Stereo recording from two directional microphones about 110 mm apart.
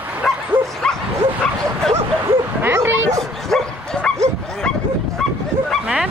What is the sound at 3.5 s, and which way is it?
Bow-wow, 5° left (ahead or behind).